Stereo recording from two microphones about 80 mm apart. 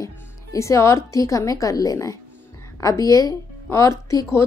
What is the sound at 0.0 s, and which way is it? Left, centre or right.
A woman's voice, left.